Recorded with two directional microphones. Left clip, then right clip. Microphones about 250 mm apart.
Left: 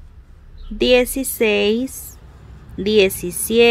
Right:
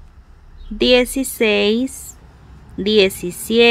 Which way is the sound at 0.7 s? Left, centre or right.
Centre.